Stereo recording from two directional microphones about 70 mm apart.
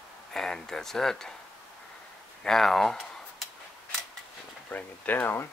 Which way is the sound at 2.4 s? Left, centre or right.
Centre.